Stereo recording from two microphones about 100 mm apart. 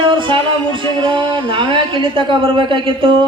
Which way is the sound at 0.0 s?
55° right (ahead or behind).